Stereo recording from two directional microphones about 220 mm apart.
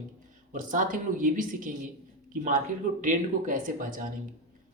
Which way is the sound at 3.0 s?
35° right (ahead or behind).